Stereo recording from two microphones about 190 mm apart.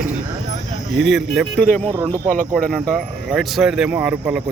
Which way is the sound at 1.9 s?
15° right (ahead or behind).